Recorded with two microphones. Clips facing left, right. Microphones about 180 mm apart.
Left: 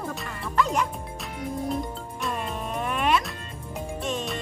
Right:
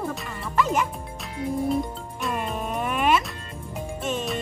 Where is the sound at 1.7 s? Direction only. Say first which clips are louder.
Right 4 dB; centre (ahead or behind).